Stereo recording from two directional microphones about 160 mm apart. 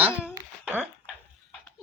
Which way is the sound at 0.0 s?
10° right (ahead or behind).